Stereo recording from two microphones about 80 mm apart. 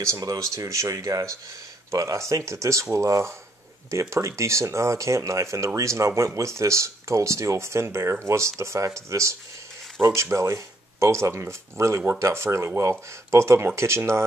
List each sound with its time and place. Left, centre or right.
0.0 s speech: right
10.1 s speech: right